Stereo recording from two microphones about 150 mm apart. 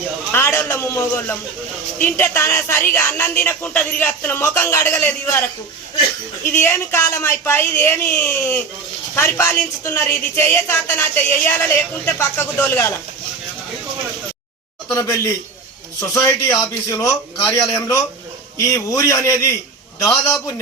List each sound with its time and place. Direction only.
0.3 s a woman's voice: 15° left (ahead or behind)
14.9 s a man's voice: 20° left (ahead or behind)